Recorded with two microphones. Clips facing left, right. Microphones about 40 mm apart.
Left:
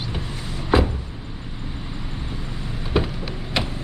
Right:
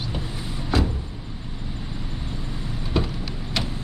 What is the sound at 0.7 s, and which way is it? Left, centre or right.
Vehicle, left.